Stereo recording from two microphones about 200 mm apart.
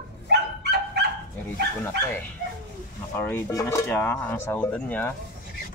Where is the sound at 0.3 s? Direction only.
55° right (ahead or behind).